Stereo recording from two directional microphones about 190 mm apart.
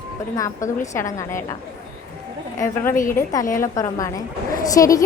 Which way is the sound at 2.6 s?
15° left (ahead or behind).